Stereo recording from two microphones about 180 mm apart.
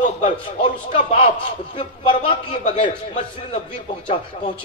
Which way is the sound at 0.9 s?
35° left (ahead or behind).